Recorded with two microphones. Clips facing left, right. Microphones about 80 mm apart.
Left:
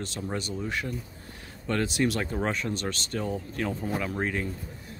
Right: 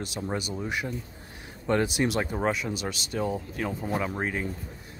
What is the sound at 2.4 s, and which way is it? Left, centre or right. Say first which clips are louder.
Speech: right 1 dB; centre.